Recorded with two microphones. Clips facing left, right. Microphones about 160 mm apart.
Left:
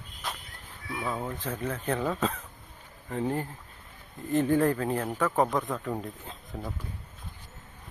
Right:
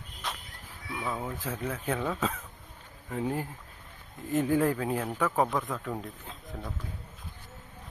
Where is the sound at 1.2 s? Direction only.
5° right (ahead or behind).